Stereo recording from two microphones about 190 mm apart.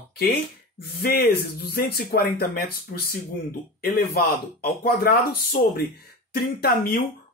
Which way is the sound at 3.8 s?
55° left (ahead or behind).